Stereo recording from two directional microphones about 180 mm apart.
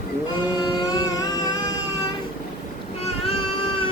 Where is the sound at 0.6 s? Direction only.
20° left (ahead or behind).